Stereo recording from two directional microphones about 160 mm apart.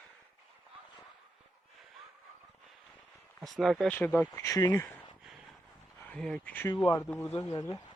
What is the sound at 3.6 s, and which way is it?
Speech, centre (ahead or behind).